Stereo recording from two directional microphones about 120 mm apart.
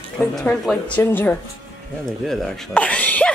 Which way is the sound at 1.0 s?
15° left (ahead or behind).